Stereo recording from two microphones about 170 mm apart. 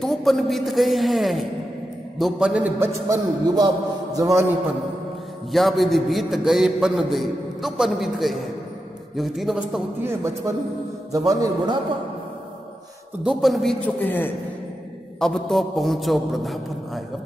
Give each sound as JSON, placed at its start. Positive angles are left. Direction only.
{"t": 0.0, "sound": "a man's voice", "side_deg": 0}
{"t": 5.5, "sound": "a man's voice", "side_deg": 0}
{"t": 10.0, "sound": "a man's voice", "side_deg": -15}
{"t": 13.2, "sound": "a man's voice", "side_deg": 0}